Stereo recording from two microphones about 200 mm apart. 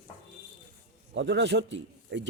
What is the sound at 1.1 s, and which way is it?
Speech, 65° right (ahead or behind).